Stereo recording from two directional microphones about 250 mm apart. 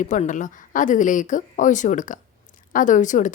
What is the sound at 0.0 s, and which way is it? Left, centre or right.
A woman's voice, left.